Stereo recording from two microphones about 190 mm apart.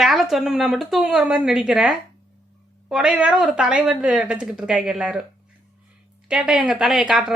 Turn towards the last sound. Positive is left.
turn(degrees=-5)  # may be behind; listen again after turning